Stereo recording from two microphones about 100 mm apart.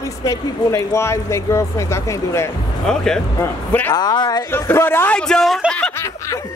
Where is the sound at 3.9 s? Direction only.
45° left (ahead or behind).